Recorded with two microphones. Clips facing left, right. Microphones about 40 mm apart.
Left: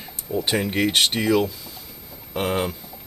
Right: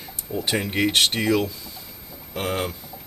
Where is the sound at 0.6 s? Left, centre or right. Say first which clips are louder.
Even; centre.